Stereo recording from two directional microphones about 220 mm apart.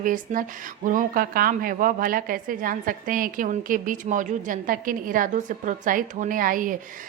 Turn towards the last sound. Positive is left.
turn(degrees=-40)  # may be behind; listen again after turning